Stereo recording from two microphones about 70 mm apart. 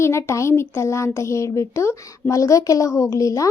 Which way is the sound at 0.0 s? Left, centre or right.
Left.